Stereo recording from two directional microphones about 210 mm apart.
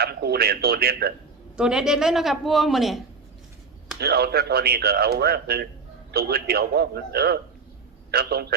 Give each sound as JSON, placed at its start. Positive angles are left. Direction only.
{"t": 0.0, "sound": "speech", "side_deg": -50}
{"t": 1.5, "sound": "a man's voice", "side_deg": -5}
{"t": 4.0, "sound": "speech", "side_deg": -50}